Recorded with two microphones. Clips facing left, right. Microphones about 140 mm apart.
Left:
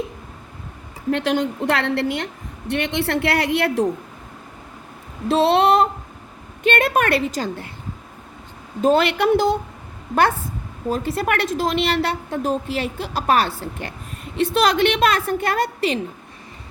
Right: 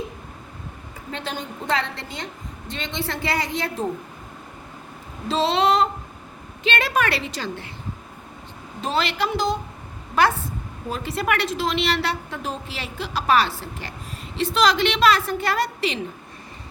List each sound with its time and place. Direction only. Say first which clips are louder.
1.1 s a woman's voice: left 11 dB; 80° left
5.3 s a woman's voice: left 4 dB; 60° left (ahead or behind)
8.8 s speech: left 8 dB; 50° left (ahead or behind)
10.9 s a woman's voice: left 2 dB; 45° left (ahead or behind)